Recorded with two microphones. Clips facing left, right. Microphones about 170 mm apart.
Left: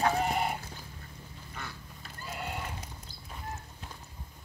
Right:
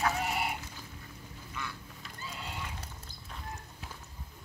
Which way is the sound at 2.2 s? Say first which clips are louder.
Left 4 dB; 55° left (ahead or behind).